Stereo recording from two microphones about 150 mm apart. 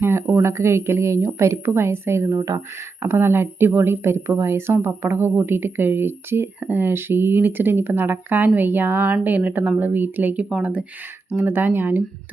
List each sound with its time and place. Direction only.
0.0 s speech: 15° right (ahead or behind)